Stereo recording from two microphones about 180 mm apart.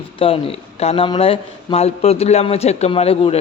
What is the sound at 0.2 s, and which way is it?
A man's voice, 30° left (ahead or behind).